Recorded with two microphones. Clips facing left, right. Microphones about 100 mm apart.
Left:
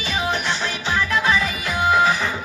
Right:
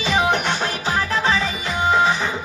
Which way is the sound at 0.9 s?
35° right (ahead or behind).